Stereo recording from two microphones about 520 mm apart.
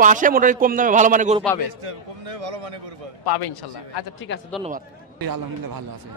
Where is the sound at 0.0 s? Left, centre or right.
Centre.